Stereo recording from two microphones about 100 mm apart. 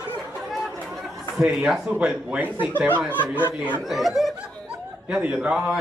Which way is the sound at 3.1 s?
20° left (ahead or behind).